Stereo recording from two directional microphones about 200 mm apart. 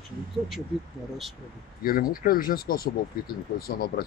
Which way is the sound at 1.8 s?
45° left (ahead or behind).